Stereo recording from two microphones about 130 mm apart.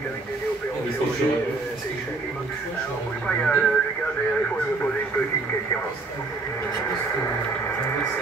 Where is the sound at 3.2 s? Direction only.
10° left (ahead or behind).